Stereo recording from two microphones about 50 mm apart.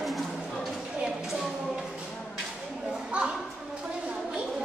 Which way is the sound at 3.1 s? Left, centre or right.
Right.